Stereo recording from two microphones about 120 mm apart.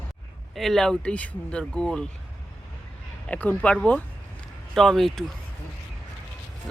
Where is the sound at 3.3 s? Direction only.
10° left (ahead or behind).